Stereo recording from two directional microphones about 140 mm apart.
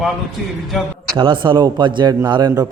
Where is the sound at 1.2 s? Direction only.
35° right (ahead or behind).